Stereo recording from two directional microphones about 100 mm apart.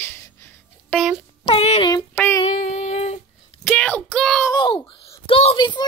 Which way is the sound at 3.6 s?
15° left (ahead or behind).